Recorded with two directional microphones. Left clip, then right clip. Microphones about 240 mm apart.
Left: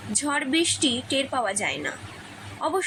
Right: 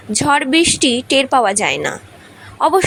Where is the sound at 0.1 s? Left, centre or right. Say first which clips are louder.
Right 11 dB; right.